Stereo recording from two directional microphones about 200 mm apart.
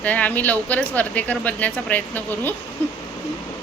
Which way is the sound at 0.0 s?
5° left (ahead or behind).